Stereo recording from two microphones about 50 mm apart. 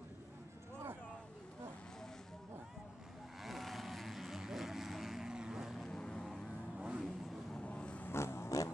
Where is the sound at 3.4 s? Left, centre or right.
Centre.